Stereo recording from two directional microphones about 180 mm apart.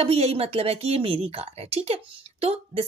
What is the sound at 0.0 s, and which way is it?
A woman's voice, 35° right (ahead or behind).